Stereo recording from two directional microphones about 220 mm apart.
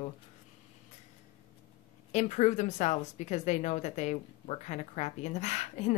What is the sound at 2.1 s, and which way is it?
A woman's voice, 30° left (ahead or behind).